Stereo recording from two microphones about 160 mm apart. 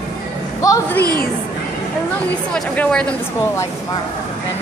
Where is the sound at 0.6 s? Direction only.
20° left (ahead or behind).